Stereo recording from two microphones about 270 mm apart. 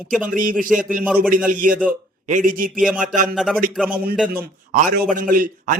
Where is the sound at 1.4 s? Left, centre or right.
Right.